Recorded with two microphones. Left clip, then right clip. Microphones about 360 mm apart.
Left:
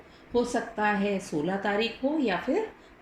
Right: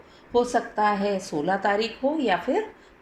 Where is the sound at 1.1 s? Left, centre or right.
Centre.